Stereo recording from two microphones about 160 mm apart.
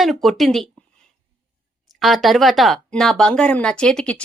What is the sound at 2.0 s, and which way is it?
Speech, centre (ahead or behind).